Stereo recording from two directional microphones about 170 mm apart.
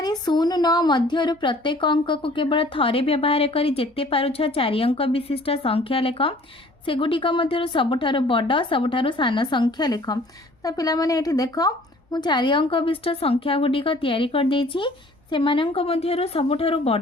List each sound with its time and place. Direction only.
0.0 s a woman's voice: 25° left (ahead or behind)